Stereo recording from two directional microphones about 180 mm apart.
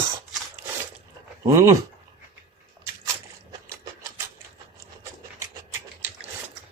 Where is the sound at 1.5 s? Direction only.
15° right (ahead or behind).